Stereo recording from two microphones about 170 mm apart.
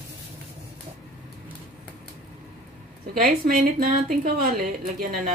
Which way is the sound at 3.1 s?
55° right (ahead or behind).